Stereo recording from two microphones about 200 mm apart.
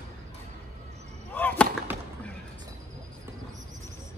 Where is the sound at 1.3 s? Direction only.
10° left (ahead or behind).